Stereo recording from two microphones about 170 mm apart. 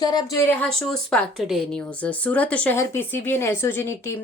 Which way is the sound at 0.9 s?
Centre (ahead or behind).